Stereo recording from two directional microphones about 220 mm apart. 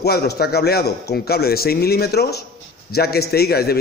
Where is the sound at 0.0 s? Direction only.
45° left (ahead or behind).